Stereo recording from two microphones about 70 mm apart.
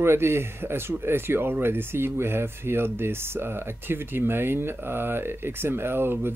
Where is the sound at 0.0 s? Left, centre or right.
Right.